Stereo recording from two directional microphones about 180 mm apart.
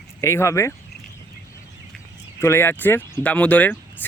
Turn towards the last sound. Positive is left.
turn(degrees=10)  # may be behind; listen again after turning